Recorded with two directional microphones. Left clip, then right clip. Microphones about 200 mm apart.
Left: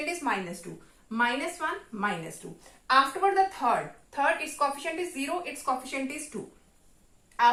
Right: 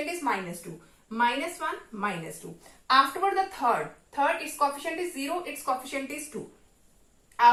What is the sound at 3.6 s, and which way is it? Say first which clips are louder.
A woman's voice: right 1 dB; 25° left (ahead or behind).